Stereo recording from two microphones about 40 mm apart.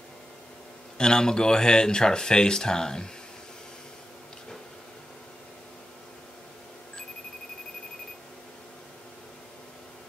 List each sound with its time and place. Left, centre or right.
0.9 s speech: centre